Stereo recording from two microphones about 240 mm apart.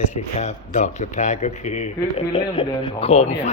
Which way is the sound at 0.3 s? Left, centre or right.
Left.